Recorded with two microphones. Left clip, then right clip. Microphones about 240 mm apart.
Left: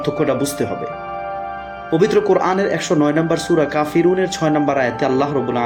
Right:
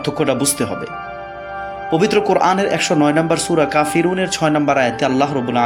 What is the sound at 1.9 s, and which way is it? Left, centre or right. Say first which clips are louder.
Speech: even; right.